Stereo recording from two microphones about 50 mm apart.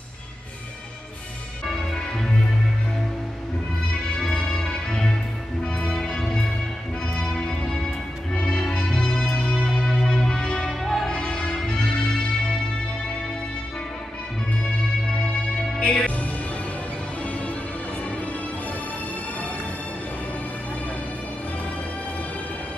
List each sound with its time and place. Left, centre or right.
4.8 s music: centre
10.7 s music: centre
11.1 s music: centre
15.8 s music: left